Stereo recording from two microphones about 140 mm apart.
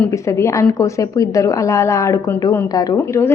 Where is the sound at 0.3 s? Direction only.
20° left (ahead or behind).